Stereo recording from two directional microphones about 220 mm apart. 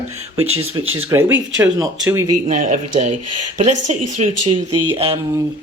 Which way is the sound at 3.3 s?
90° right.